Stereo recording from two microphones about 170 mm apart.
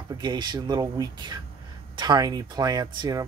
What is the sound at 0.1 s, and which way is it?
Speech, 25° right (ahead or behind).